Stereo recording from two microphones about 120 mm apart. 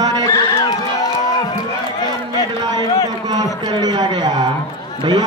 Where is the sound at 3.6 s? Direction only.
35° right (ahead or behind).